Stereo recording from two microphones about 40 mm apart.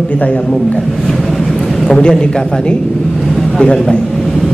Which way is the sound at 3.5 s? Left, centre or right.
Left.